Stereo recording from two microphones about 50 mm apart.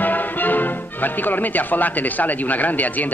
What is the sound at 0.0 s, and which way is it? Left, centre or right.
Speech, left.